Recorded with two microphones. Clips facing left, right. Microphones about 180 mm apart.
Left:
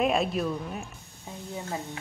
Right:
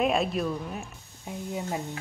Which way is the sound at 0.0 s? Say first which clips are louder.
Even; centre (ahead or behind).